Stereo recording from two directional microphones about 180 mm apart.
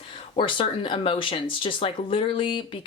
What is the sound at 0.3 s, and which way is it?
Speech, 30° left (ahead or behind).